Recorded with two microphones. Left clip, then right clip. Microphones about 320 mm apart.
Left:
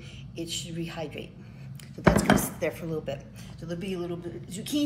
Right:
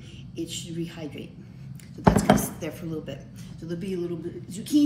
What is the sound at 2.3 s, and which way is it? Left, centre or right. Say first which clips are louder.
Speech: left 1 dB; centre.